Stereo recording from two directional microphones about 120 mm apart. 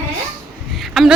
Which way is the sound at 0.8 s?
Centre (ahead or behind).